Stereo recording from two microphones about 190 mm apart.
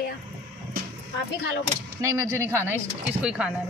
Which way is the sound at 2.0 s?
15° right (ahead or behind).